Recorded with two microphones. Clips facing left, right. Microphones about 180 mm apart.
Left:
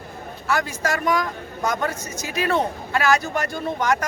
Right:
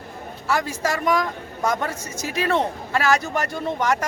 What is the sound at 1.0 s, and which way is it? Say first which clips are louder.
Speech: right 1 dB; centre (ahead or behind).